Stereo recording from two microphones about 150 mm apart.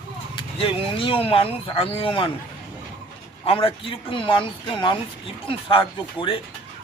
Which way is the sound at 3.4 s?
40° left (ahead or behind).